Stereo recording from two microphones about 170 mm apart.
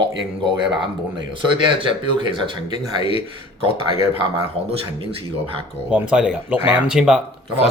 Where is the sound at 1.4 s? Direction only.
30° right (ahead or behind).